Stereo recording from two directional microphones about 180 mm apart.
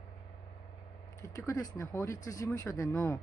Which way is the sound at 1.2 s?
20° left (ahead or behind).